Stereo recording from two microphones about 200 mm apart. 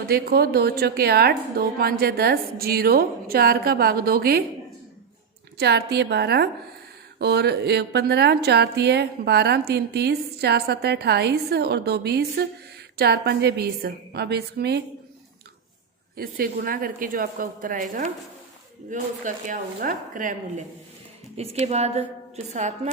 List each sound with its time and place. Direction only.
0.1 s a woman's voice: 50° right (ahead or behind)
5.5 s a woman's voice: 55° right (ahead or behind)
16.1 s a woman's voice: 45° right (ahead or behind)
18.9 s speech: 40° right (ahead or behind)
21.3 s speech: 35° right (ahead or behind)